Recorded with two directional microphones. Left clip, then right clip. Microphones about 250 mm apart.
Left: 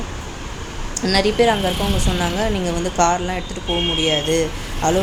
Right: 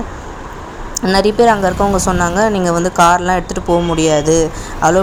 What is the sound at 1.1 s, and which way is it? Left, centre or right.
A woman's voice, right.